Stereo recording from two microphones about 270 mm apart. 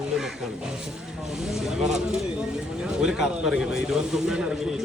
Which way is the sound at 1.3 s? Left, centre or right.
Centre.